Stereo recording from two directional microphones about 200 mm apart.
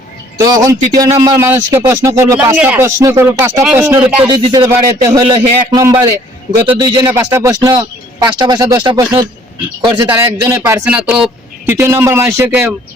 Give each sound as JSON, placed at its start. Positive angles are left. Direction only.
{"t": 0.3, "sound": "a man's voice", "side_deg": -20}